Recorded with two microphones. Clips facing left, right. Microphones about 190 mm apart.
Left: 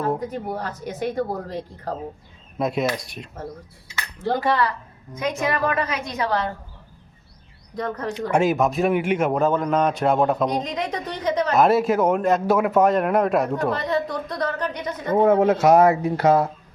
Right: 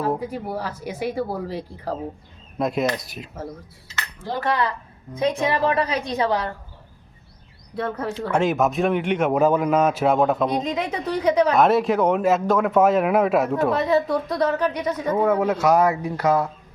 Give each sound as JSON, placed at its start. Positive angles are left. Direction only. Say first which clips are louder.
{"t": 0.0, "sound": "a woman's voice", "louder": "even", "side_deg": -5}
{"t": 4.5, "sound": "a man's voice", "louder": "even", "side_deg": 0}
{"t": 5.1, "sound": "a woman's voice", "louder": "right 3 dB", "side_deg": -30}
{"t": 7.8, "sound": "a man's voice", "louder": "right 1 dB", "side_deg": -5}
{"t": 8.1, "sound": "speech", "louder": "left 2 dB", "side_deg": 10}
{"t": 8.5, "sound": "a man's voice", "louder": "even", "side_deg": 0}
{"t": 15.1, "sound": "speech", "louder": "left 4 dB", "side_deg": 30}